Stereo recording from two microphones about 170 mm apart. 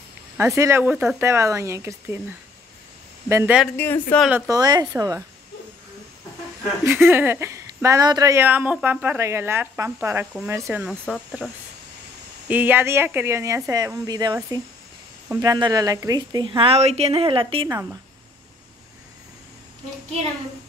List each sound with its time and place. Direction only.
0.4 s speech: 15° right (ahead or behind)
3.3 s speech: 15° right (ahead or behind)
3.7 s speech: 10° left (ahead or behind)
4.5 s a woman's voice: 25° right (ahead or behind)
6.8 s speech: 15° right (ahead or behind); by 11.5 s 5° left (ahead or behind)
12.4 s a woman's voice: 10° right (ahead or behind); by 17.6 s 30° right (ahead or behind)